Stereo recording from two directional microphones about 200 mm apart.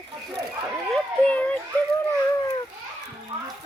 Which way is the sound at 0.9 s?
5° left (ahead or behind).